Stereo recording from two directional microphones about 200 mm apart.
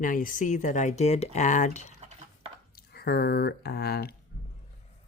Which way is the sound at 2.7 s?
50° left (ahead or behind).